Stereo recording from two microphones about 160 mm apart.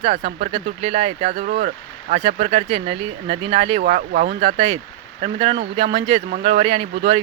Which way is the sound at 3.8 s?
55° right (ahead or behind).